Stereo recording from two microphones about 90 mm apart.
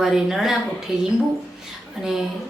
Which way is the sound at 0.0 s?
5° right (ahead or behind).